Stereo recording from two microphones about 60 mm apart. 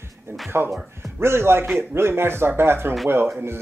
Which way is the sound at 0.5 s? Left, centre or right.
Right.